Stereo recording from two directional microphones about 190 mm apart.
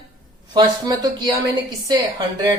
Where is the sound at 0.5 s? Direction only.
20° right (ahead or behind).